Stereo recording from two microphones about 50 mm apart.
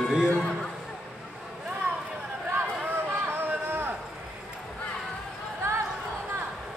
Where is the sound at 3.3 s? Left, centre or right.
Right.